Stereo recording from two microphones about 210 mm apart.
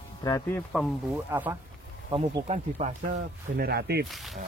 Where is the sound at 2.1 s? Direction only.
25° right (ahead or behind).